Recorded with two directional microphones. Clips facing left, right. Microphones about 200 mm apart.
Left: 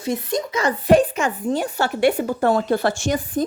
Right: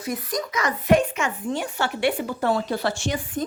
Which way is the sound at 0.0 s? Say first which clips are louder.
Left 5 dB; 25° left (ahead or behind).